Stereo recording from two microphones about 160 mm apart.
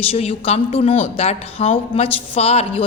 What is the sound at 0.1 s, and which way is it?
A woman's voice, 40° left (ahead or behind).